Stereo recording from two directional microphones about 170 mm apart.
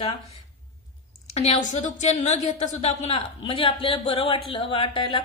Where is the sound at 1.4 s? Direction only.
40° left (ahead or behind).